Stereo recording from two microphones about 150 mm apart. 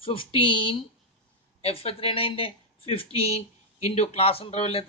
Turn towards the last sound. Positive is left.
turn(degrees=40)  # may be behind; listen again after turning